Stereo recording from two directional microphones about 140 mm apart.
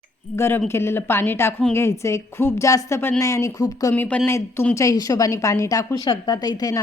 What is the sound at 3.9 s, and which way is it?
A woman's voice, 10° left (ahead or behind).